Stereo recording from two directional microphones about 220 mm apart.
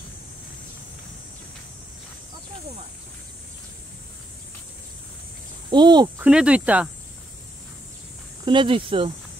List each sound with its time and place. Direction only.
5.7 s speech: 20° right (ahead or behind)
6.2 s speech: 5° right (ahead or behind)
8.5 s speech: 25° right (ahead or behind)